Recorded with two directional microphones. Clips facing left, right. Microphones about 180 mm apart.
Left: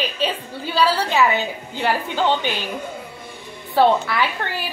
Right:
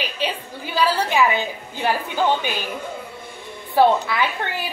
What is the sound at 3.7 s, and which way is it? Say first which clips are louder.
Speech: even; 20° right (ahead or behind).